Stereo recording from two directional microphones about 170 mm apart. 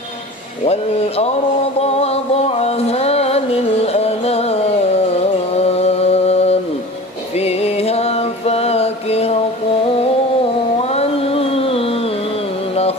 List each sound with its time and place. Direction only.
0.7 s speech: 35° left (ahead or behind)
1.8 s music: 40° left (ahead or behind)
7.3 s mantra: 35° left (ahead or behind)
10.8 s a sound: 35° left (ahead or behind)